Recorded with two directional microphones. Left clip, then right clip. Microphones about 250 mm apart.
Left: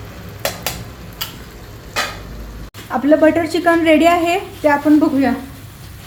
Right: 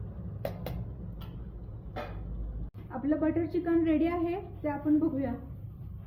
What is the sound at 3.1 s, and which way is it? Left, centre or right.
A woman's voice, left.